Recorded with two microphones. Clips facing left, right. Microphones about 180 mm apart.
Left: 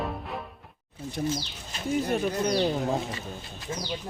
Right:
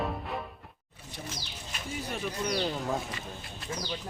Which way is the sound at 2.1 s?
45° left (ahead or behind).